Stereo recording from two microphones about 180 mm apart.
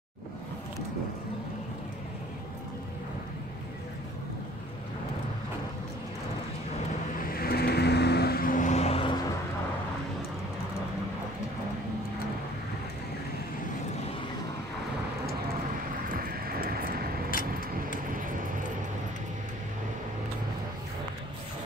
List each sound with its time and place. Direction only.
7.2 s vehicle: 55° left (ahead or behind); by 9.1 s 35° left (ahead or behind)
16.1 s vehicle: 55° right (ahead or behind)
17.3 s vehicle: 50° left (ahead or behind)